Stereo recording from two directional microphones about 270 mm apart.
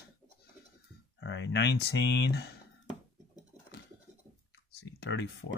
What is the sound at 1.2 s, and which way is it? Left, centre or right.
Speech, left.